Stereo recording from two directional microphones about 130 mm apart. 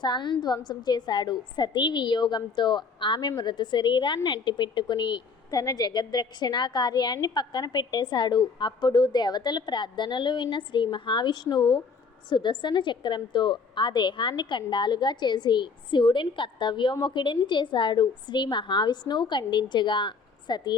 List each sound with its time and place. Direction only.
0.0 s a woman's voice: 35° left (ahead or behind)